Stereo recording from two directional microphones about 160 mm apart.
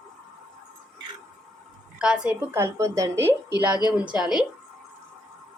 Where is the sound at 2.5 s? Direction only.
15° right (ahead or behind).